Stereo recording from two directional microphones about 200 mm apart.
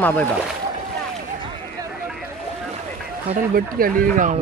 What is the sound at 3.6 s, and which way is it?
Speech, 45° right (ahead or behind).